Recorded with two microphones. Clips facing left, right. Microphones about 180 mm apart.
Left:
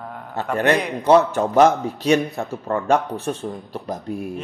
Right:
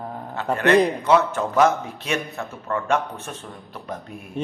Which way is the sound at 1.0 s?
35° left (ahead or behind).